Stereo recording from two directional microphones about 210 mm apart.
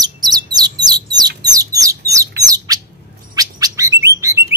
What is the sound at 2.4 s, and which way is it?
Bird, 15° right (ahead or behind).